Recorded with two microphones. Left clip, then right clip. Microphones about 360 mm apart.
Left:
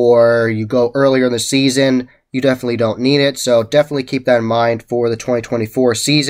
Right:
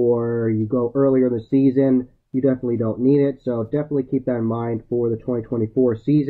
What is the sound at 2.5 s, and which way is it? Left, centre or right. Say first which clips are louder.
Speech: left 7 dB; centre.